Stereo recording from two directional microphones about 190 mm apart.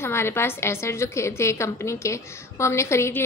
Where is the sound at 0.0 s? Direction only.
15° left (ahead or behind).